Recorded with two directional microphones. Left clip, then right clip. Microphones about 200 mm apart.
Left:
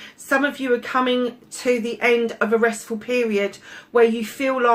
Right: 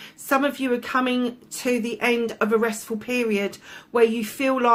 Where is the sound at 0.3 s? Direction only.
50° right (ahead or behind).